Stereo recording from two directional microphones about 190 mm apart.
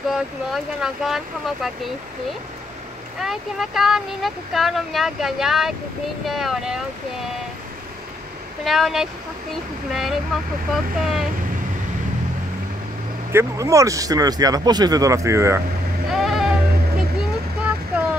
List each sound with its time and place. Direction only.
0.1 s speech: centre (ahead or behind)
3.2 s speech: centre (ahead or behind)
8.6 s speech: centre (ahead or behind)
13.3 s speech: 15° right (ahead or behind)
16.1 s sheep: centre (ahead or behind)